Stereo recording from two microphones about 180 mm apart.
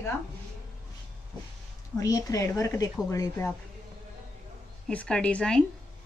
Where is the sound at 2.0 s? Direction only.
20° left (ahead or behind).